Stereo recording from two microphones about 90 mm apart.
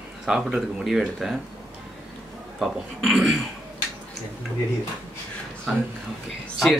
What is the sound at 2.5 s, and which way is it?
Speech, 5° right (ahead or behind).